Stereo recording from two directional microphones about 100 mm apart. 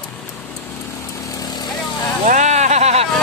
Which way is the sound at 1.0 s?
30° left (ahead or behind).